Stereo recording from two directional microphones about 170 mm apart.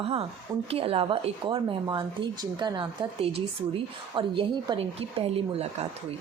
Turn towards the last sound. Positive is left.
turn(degrees=-35)  # may be behind; listen again after turning